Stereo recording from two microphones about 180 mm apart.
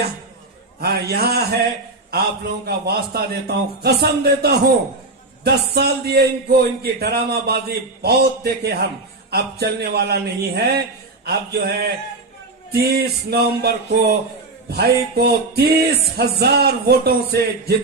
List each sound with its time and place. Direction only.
0.8 s speech: 60° right (ahead or behind)
2.6 s speech: 60° right (ahead or behind)